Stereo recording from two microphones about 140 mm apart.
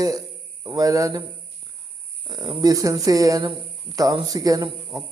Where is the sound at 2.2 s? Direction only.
30° right (ahead or behind).